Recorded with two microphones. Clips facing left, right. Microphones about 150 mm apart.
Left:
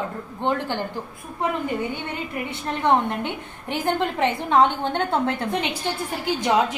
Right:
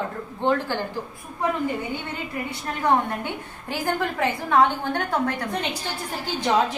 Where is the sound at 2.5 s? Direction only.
25° left (ahead or behind).